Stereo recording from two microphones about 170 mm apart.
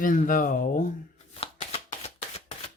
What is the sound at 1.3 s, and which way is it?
Shuffling cards, 35° left (ahead or behind).